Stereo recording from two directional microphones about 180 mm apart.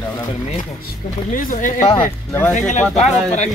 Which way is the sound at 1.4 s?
50° left (ahead or behind).